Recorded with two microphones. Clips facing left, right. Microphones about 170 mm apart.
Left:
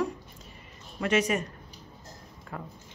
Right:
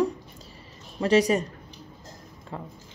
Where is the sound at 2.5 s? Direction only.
25° right (ahead or behind).